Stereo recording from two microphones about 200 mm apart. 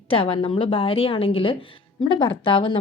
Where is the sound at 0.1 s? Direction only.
25° left (ahead or behind).